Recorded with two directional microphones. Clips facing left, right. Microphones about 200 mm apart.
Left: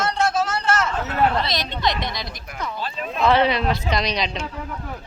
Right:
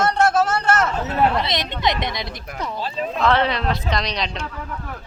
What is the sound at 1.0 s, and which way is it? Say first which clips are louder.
Speech: even; 30° right (ahead or behind).